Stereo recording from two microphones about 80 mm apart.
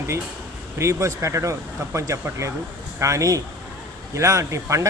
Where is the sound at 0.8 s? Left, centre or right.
Right.